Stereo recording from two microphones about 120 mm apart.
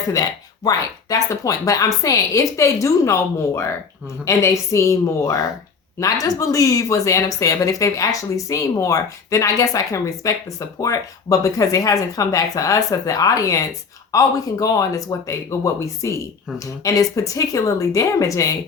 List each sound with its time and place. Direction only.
0.1 s speech: 30° left (ahead or behind)